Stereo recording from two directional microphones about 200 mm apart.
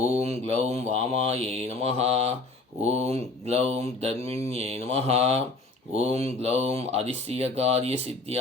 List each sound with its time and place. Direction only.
0.1 s mantra: 30° right (ahead or behind)
0.6 s speech: 30° right (ahead or behind)